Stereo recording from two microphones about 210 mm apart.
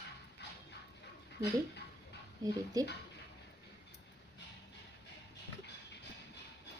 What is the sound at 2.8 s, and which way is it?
Speech, 15° right (ahead or behind).